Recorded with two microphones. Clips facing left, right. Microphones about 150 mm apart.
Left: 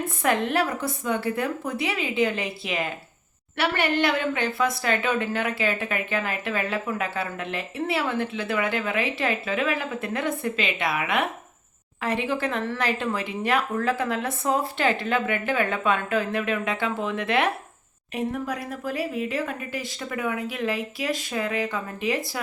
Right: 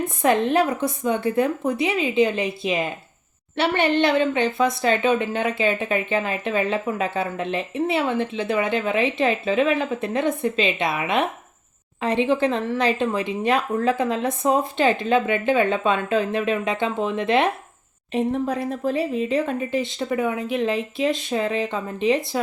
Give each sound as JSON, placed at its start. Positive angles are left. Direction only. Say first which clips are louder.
{"t": 0.2, "sound": "a woman's voice", "louder": "right 5 dB", "side_deg": -20}